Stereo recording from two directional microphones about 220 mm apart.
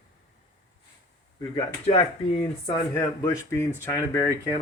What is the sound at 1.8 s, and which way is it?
Speech, 25° left (ahead or behind).